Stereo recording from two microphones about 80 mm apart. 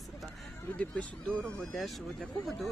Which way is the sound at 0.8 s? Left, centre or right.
Centre.